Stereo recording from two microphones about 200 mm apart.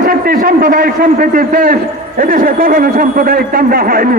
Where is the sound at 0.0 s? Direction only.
45° right (ahead or behind).